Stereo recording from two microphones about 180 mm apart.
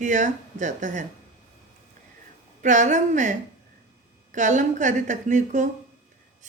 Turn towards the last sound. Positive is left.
turn(degrees=-45)  # may be behind; listen again after turning